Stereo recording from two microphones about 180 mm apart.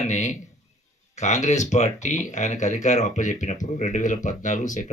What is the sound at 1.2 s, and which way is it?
Speech, 40° left (ahead or behind).